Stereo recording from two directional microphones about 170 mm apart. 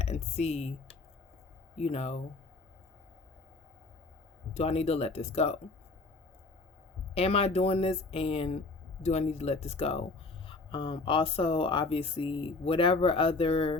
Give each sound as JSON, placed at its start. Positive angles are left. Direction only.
{"t": 0.0, "sound": "speech", "side_deg": 40}
{"t": 1.8, "sound": "speech", "side_deg": 40}
{"t": 4.5, "sound": "speech", "side_deg": 35}
{"t": 7.1, "sound": "speech", "side_deg": 35}